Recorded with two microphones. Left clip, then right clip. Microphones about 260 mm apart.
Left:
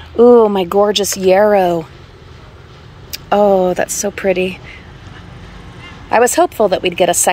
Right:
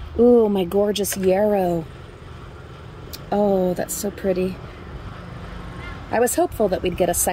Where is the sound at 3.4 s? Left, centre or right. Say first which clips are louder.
Left 8 dB; left.